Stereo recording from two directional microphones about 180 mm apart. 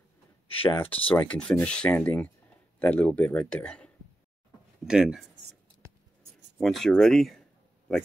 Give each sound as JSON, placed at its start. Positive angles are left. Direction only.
{"t": 0.5, "sound": "speech", "side_deg": 30}
{"t": 1.0, "sound": "speech", "side_deg": 10}
{"t": 6.6, "sound": "speech", "side_deg": 0}